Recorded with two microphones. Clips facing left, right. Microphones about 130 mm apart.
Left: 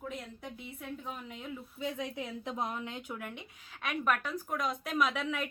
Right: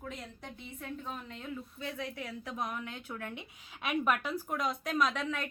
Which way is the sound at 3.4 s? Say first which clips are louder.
Right 1 dB; 10° right (ahead or behind).